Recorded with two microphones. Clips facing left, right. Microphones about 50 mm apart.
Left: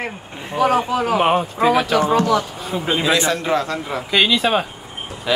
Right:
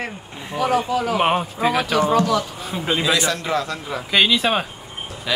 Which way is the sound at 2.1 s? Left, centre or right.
Left.